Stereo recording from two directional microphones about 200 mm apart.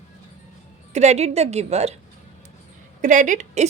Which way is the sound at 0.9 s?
35° right (ahead or behind).